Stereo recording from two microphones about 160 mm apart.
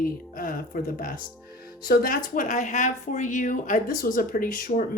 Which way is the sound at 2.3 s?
50° left (ahead or behind).